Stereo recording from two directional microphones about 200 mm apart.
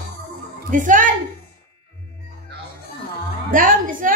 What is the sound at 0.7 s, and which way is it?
Speech, 40° right (ahead or behind).